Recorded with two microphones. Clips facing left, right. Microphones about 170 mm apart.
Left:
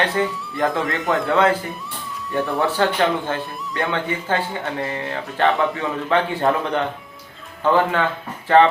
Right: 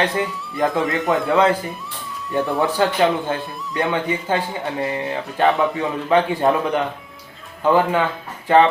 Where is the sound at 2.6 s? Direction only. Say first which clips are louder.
Right 1 dB; 15° right (ahead or behind).